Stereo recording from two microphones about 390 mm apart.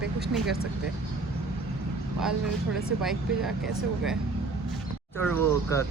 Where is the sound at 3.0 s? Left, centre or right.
Centre.